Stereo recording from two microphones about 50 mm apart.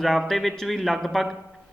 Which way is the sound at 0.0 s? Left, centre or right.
Centre.